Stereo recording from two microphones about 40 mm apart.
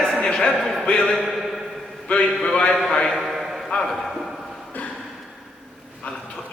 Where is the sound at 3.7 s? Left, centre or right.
Centre.